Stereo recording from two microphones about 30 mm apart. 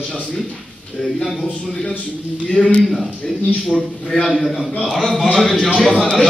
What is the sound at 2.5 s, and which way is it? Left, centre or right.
Speech, left.